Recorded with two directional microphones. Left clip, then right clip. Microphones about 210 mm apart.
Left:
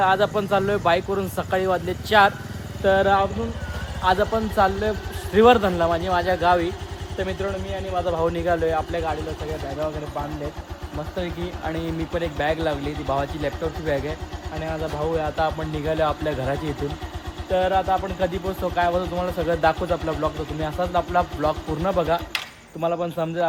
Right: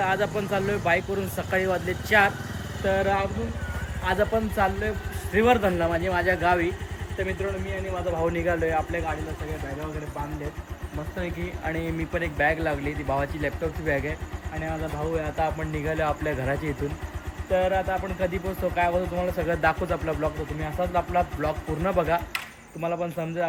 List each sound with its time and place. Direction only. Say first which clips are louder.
0.0 s speech: left 6 dB; 15° left (ahead or behind)
8.0 s speech: left 2 dB; 15° left (ahead or behind)
11.2 s speech: left 3 dB; 10° left (ahead or behind)
15.1 s speech: left 3 dB; 10° left (ahead or behind)